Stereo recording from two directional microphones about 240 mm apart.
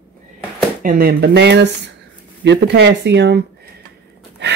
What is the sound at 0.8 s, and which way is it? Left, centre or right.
Speech, right.